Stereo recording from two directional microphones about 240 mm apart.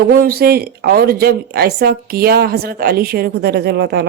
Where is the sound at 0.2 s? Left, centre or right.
Right.